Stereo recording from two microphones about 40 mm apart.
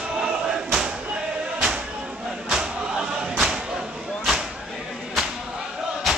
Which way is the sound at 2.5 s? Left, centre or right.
Centre.